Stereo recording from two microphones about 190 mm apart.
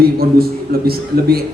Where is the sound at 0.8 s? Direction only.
55° right (ahead or behind).